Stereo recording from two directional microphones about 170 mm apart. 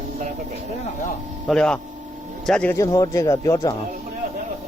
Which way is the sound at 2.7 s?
20° left (ahead or behind).